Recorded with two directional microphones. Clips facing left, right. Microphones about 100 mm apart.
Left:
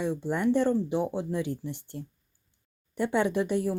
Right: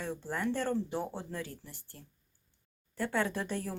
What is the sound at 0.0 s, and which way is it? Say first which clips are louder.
Speech: left 8 dB; 20° left (ahead or behind).